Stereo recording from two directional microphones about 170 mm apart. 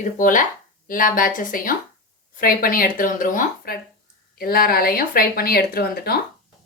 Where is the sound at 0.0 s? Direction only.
50° left (ahead or behind).